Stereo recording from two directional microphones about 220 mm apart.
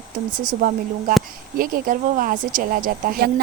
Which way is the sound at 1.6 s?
40° right (ahead or behind).